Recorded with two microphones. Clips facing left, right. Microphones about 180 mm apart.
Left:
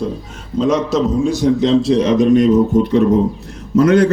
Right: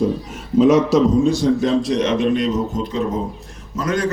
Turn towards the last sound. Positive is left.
turn(degrees=65)  # may be behind; listen again after turning